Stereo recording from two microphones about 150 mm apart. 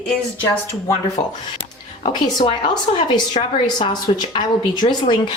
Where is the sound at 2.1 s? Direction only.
30° left (ahead or behind).